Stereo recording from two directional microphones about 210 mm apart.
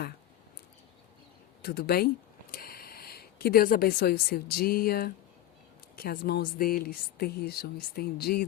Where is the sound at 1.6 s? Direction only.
50° left (ahead or behind).